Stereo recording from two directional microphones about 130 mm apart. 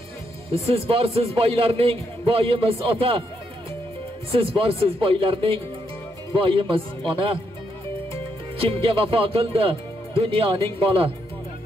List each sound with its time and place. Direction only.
0.7 s a man's voice: 50° right (ahead or behind)
4.3 s a man's voice: 45° right (ahead or behind)
8.5 s a man's voice: 45° right (ahead or behind)